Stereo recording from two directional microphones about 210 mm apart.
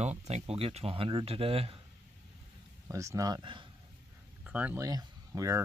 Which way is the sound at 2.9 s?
15° right (ahead or behind).